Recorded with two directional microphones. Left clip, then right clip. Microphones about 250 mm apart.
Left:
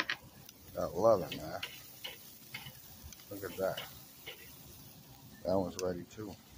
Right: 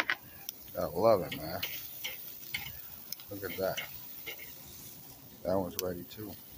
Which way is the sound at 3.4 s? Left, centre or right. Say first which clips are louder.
Right 2 dB; right.